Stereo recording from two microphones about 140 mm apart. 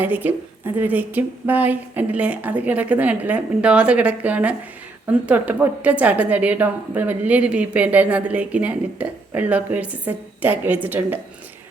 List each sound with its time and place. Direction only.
0.0 s a woman's voice: 15° right (ahead or behind)